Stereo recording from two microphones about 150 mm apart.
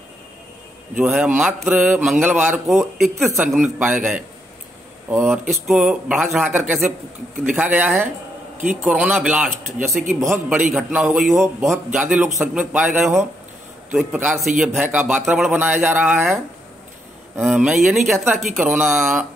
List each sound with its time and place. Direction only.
0.9 s speech: 5° right (ahead or behind)
3.8 s speech: 10° right (ahead or behind)
11.3 s speech: 15° right (ahead or behind)
17.4 s speech: 5° right (ahead or behind)